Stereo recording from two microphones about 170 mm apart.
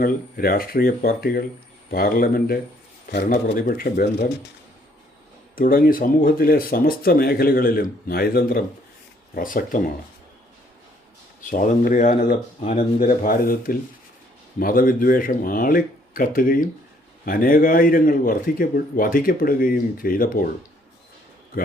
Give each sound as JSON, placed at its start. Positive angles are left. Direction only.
{"t": 0.0, "sound": "a man's voice", "side_deg": 60}
{"t": 5.5, "sound": "a man's voice", "side_deg": 55}
{"t": 11.4, "sound": "a man's voice", "side_deg": 50}